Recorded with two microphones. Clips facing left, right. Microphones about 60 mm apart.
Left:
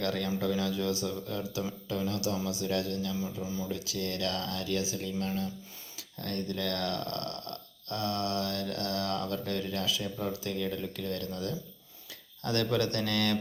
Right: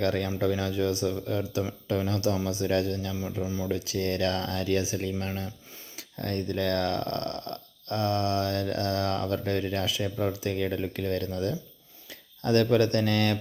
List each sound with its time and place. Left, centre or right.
0.0 s speech: right
3.7 s speech: right